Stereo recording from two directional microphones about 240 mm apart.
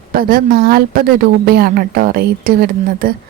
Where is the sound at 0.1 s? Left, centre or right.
Right.